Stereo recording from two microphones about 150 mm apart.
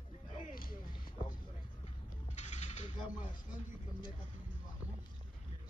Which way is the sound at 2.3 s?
50° left (ahead or behind).